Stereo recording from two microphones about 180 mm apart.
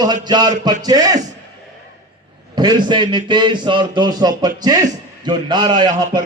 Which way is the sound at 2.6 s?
25° right (ahead or behind).